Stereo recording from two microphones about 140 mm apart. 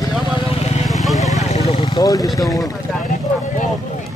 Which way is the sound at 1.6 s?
45° left (ahead or behind).